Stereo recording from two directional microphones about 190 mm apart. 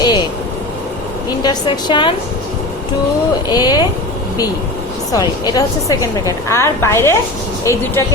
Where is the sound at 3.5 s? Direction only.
20° left (ahead or behind).